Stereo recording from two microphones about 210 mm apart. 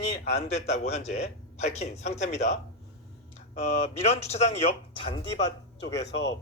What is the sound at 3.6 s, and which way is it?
A man's voice, 30° left (ahead or behind).